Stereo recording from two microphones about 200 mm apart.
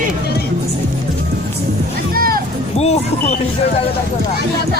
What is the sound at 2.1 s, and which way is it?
Music, 45° right (ahead or behind).